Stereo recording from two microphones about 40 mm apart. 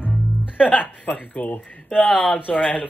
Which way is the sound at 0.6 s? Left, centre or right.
Left.